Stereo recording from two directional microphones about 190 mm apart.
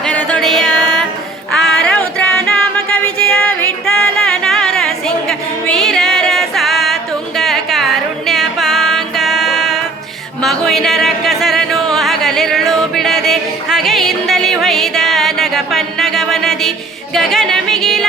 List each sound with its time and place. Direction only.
0.0 s music: 5° left (ahead or behind)
1.5 s a sound: centre (ahead or behind)
17.2 s music: centre (ahead or behind)